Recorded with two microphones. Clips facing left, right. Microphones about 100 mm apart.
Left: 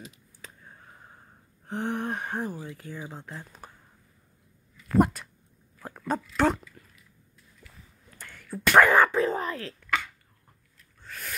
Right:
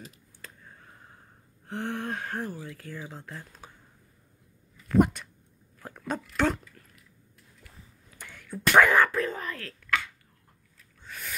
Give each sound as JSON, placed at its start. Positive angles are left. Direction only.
{"t": 0.4, "sound": "a sound", "side_deg": 10}
{"t": 1.7, "sound": "speech", "side_deg": 15}
{"t": 4.8, "sound": "dog", "side_deg": 5}
{"t": 6.3, "sound": "speech", "side_deg": 5}
{"t": 8.3, "sound": "speech", "side_deg": 0}
{"t": 9.2, "sound": "speech", "side_deg": 30}
{"t": 9.6, "sound": "a sound", "side_deg": 15}
{"t": 11.1, "sound": "owl", "side_deg": 0}